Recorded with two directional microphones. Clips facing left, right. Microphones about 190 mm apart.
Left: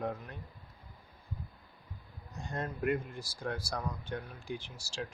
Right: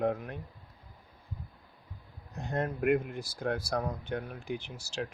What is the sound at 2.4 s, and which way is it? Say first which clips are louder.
Speech: right 5 dB; 60° right (ahead or behind).